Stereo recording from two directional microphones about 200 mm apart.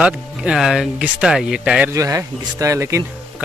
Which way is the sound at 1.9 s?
15° right (ahead or behind).